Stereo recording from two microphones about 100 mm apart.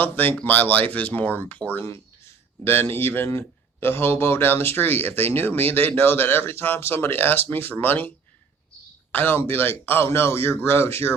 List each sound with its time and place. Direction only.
0.0 s speech: 20° left (ahead or behind)
2.9 s speech: 20° left (ahead or behind)
9.1 s speech: 20° left (ahead or behind)